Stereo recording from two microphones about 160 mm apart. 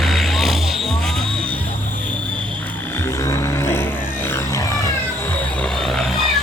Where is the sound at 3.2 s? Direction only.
20° left (ahead or behind).